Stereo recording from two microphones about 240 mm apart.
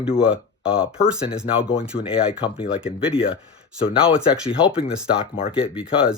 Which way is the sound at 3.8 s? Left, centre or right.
Left.